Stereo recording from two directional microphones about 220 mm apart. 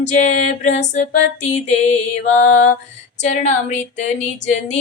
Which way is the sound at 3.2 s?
30° left (ahead or behind).